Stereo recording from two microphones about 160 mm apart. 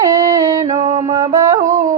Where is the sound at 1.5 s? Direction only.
50° right (ahead or behind).